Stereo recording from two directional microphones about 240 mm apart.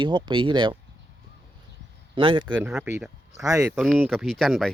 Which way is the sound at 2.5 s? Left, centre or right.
Centre.